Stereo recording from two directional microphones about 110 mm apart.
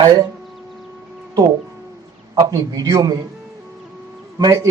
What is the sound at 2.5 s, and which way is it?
Speech, 35° right (ahead or behind).